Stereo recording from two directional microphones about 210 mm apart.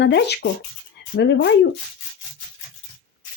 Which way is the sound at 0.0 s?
55° left (ahead or behind).